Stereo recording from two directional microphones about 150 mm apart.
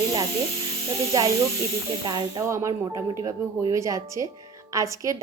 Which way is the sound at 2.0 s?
25° right (ahead or behind).